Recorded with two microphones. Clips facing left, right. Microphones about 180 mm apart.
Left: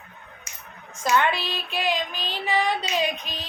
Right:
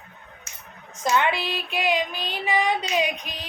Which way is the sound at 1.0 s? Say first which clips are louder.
Even; 15° right (ahead or behind).